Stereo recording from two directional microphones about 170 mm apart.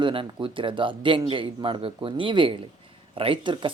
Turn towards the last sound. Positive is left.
turn(degrees=-30)  # may be behind; listen again after turning